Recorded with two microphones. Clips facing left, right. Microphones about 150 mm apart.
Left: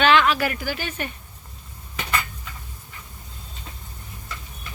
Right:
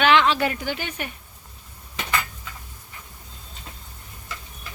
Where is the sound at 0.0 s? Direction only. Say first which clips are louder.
Even; 20° right (ahead or behind).